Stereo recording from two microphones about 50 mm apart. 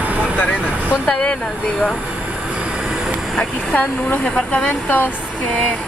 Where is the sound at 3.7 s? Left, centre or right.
Left.